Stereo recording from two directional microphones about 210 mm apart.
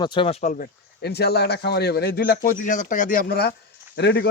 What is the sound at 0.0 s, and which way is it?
Speech, 25° left (ahead or behind).